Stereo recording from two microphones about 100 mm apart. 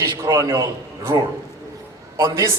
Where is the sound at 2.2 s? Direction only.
30° right (ahead or behind).